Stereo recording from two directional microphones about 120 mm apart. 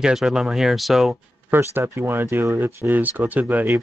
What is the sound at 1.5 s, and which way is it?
Speech, 20° right (ahead or behind).